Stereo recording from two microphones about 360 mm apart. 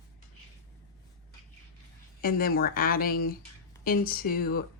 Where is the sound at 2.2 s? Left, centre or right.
Left.